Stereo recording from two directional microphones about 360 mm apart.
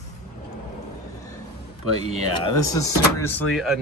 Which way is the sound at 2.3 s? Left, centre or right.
Centre.